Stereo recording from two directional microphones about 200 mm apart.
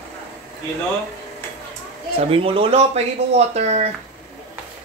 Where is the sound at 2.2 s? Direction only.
30° right (ahead or behind).